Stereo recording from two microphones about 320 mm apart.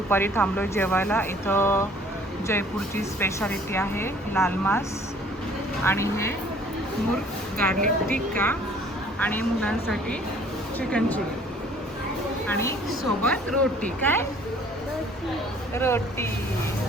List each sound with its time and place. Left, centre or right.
0.1 s speech: centre
5.8 s speech: centre
7.8 s speech: right
9.1 s speech: centre
12.5 s speech: centre
15.8 s speech: centre